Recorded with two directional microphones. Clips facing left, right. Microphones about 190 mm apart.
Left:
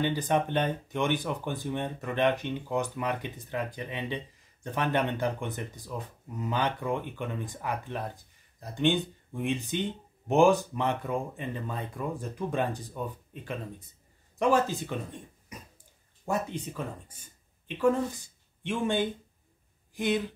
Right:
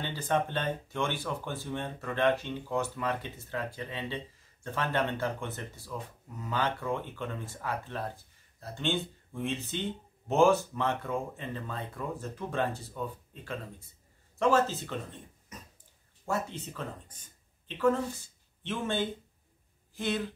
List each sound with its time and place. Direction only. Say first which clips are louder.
0.0 s speech: left 4 dB; 15° left (ahead or behind)